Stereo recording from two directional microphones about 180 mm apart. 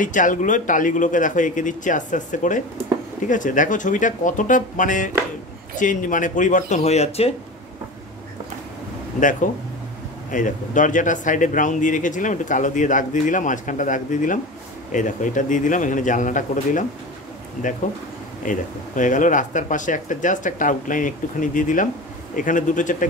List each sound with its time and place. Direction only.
0.0 s speech: 45° left (ahead or behind)
9.2 s speech: 45° left (ahead or behind)
18.4 s speech: 45° left (ahead or behind)